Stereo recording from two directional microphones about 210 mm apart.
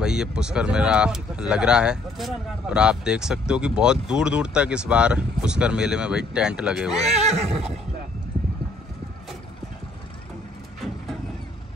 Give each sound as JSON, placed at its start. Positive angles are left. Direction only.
{"t": 0.0, "sound": "speech", "side_deg": -5}
{"t": 7.1, "sound": "neigh", "side_deg": -30}